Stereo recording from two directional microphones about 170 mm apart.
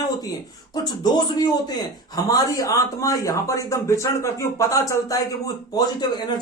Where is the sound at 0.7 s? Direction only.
25° left (ahead or behind).